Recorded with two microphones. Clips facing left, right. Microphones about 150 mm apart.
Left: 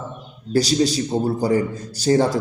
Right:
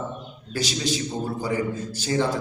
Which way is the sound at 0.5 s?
40° left (ahead or behind).